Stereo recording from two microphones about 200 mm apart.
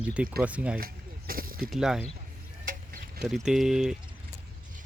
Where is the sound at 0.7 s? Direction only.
45° right (ahead or behind).